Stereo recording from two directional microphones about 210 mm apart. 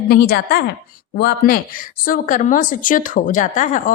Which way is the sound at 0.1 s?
50° left (ahead or behind).